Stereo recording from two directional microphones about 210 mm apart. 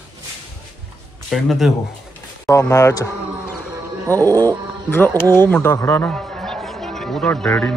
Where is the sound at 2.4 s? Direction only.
15° left (ahead or behind).